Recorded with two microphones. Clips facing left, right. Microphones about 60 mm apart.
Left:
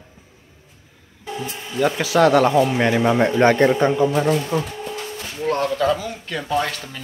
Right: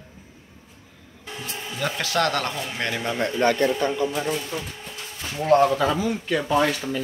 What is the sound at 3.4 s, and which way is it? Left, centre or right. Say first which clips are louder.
Speech: left 5 dB; left.